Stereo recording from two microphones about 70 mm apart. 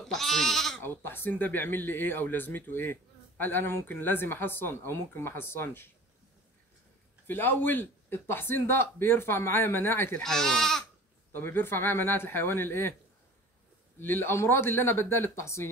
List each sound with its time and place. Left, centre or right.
0.0 s goat: centre
0.8 s speech: left
7.2 s speech: left
10.2 s speech: centre
11.3 s speech: left
13.9 s speech: left